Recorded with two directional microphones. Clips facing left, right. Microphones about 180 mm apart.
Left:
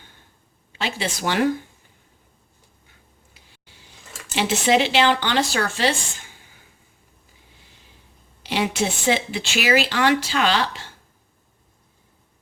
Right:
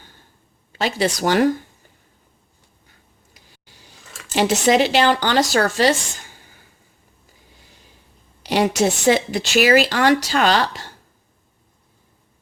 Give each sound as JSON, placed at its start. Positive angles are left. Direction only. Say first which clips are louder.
{"t": 0.7, "sound": "speech", "louder": "right 6 dB", "side_deg": -40}
{"t": 4.4, "sound": "speech", "louder": "right 3 dB", "side_deg": -45}
{"t": 8.4, "sound": "speech", "louder": "right 5 dB", "side_deg": -40}